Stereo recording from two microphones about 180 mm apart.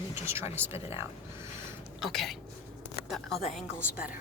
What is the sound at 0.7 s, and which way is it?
Speech, 35° left (ahead or behind).